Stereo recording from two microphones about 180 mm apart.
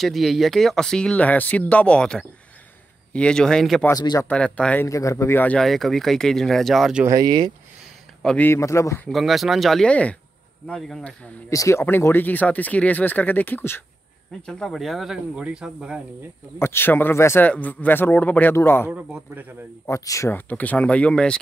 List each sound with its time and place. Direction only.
0.0 s speech: centre (ahead or behind)
3.8 s speech: 20° left (ahead or behind)
4.3 s speech: 5° left (ahead or behind)
4.8 s speech: 15° left (ahead or behind); by 7.1 s 5° right (ahead or behind)
7.1 s speech: 20° right (ahead or behind)
8.2 s speech: 5° left (ahead or behind)
9.1 s speech: centre (ahead or behind)
11.5 s speech: 15° left (ahead or behind); by 16.0 s 5° right (ahead or behind)
16.5 s speech: 15° left (ahead or behind)
18.9 s a man's voice: 10° right (ahead or behind)
19.9 s speech: 15° left (ahead or behind)